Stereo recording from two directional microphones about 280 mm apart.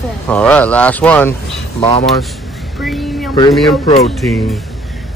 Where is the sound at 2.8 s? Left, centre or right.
Centre.